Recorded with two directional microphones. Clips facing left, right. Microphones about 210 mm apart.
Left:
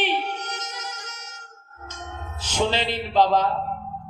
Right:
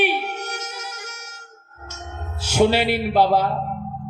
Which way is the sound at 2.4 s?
10° right (ahead or behind).